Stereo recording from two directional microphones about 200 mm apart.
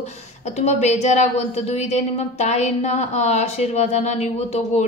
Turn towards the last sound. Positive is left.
turn(degrees=35)  # may be behind; listen again after turning